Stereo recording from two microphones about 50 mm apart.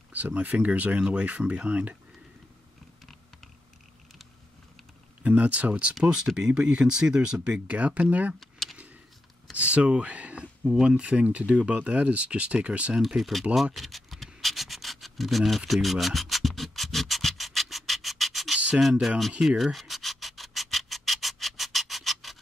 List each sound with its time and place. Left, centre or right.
0.1 s speech: right
5.2 s speech: right
8.4 s vehicle: centre
9.5 s speech: right
10.4 s speech: centre
11.0 s speech: right
13.0 s speech: centre
13.7 s scratch: centre
18.8 s speech: centre
19.4 s rub: centre